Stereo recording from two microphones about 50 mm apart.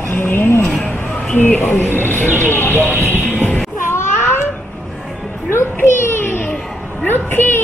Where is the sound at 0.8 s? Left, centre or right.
Left.